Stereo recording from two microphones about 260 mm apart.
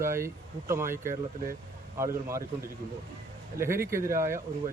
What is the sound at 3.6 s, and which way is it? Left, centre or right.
Speech, centre.